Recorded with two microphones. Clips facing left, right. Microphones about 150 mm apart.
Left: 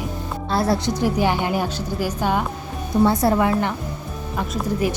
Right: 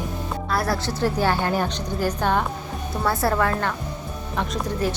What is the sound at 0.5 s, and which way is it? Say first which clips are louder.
A woman's voice: left 5 dB; 25° left (ahead or behind).